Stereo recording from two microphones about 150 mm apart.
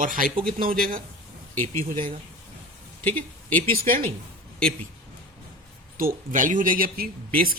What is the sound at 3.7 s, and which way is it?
Speech, 75° right (ahead or behind).